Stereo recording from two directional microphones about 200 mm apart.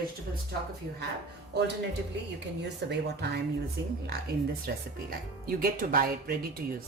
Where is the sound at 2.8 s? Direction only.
55° right (ahead or behind).